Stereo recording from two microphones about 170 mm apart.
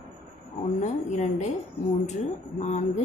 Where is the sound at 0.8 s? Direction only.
45° left (ahead or behind).